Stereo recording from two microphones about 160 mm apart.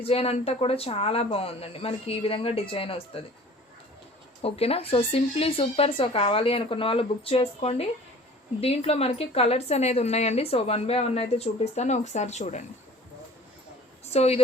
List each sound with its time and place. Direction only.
0.0 s a woman's voice: 40° left (ahead or behind)
4.4 s a woman's voice: 40° left (ahead or behind)
14.0 s a woman's voice: 40° left (ahead or behind)